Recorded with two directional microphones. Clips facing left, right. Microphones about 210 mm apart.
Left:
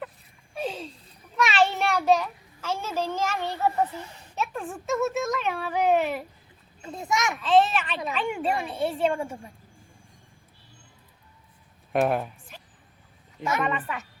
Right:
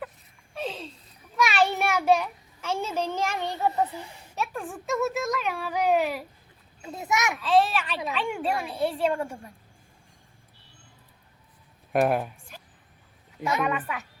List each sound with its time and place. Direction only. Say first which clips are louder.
0.5 s a sound: left 2 dB; 5° left (ahead or behind)
2.8 s a child's voice: left 1 dB; 15° right (ahead or behind)
4.4 s a child's voice: left 1 dB; centre (ahead or behind)
11.9 s a child's voice: right 1 dB; centre (ahead or behind)